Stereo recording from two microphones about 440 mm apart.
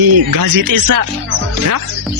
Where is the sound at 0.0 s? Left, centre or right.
Right.